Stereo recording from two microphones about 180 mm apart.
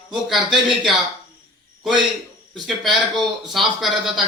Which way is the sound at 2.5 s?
Centre (ahead or behind).